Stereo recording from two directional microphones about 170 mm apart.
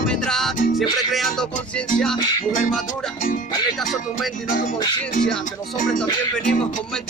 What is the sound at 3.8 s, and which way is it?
Music, centre (ahead or behind).